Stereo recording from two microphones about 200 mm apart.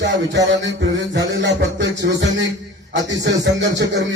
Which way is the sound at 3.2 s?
65° right (ahead or behind).